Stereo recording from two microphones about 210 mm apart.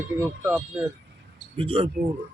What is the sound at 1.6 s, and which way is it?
Speech, 25° right (ahead or behind).